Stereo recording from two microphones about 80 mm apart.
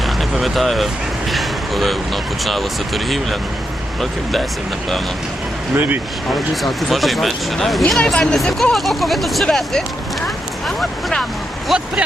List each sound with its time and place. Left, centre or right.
0.0 s a sound: centre
1.3 s speech: centre
5.7 s speech: right
6.5 s speech: centre